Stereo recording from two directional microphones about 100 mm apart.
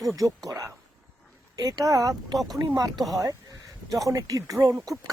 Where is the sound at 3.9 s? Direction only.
35° right (ahead or behind).